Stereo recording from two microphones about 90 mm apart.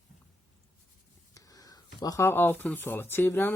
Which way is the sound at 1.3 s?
40° left (ahead or behind).